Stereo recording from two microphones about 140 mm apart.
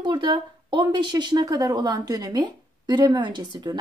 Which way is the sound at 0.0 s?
35° right (ahead or behind).